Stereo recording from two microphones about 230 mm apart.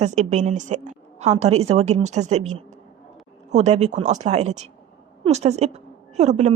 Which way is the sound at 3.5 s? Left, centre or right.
Right.